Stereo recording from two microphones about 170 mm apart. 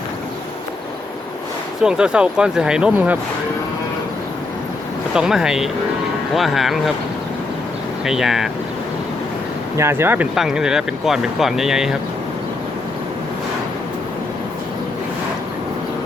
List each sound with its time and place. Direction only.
1.8 s speech: 5° right (ahead or behind)
5.1 s speech: 5° right (ahead or behind)
8.0 s speech: centre (ahead or behind)
9.7 s speech: 15° right (ahead or behind)